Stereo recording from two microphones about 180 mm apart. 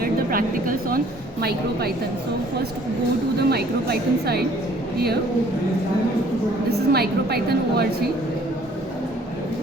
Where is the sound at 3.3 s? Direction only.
60° right (ahead or behind).